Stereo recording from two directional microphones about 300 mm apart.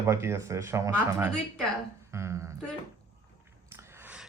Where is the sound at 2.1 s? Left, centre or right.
Centre.